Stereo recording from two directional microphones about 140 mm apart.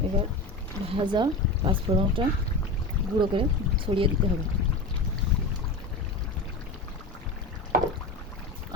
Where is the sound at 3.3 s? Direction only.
40° right (ahead or behind).